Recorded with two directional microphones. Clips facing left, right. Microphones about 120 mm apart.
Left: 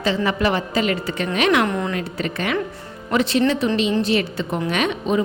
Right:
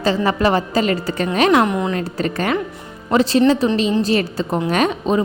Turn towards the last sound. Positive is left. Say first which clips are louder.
# right 3 dB
turn(degrees=-35)  # may be behind; listen again after turning